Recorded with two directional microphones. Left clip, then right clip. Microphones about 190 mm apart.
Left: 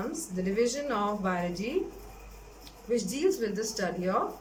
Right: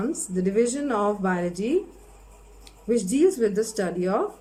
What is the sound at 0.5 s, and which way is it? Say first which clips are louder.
Speech: right 4 dB; 40° right (ahead or behind).